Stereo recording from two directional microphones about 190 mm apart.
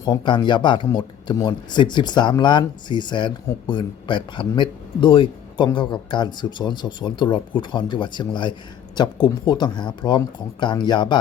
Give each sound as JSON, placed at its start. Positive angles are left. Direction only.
{"t": 0.0, "sound": "speech", "side_deg": 25}